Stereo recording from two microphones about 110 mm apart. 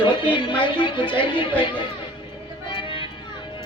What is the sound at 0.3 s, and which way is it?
Speech, 50° left (ahead or behind).